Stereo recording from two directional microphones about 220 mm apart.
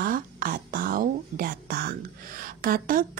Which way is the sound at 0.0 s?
40° right (ahead or behind).